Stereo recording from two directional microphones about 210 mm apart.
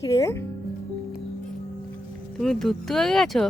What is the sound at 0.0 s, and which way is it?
Music, 15° left (ahead or behind).